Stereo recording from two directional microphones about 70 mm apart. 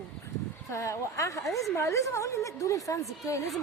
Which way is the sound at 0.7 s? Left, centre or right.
Left.